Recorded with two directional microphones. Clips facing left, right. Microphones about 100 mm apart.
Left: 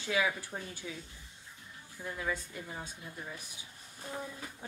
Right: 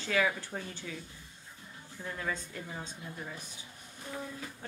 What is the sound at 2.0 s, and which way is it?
A child's voice, 5° left (ahead or behind).